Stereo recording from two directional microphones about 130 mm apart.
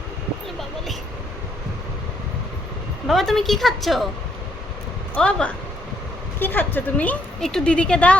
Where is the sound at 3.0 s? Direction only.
Centre (ahead or behind).